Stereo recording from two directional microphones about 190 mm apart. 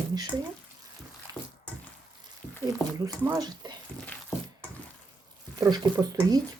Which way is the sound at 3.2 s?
15° right (ahead or behind).